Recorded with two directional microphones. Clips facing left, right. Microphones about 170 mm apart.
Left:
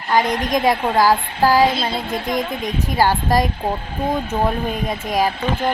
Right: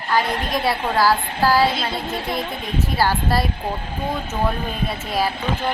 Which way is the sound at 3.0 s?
15° left (ahead or behind).